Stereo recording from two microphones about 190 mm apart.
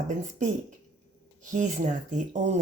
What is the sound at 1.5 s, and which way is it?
Speech, 40° right (ahead or behind).